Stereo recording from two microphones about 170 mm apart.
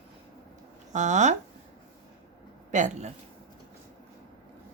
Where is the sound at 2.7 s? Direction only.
45° right (ahead or behind).